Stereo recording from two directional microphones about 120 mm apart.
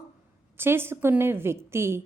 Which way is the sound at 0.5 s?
20° right (ahead or behind).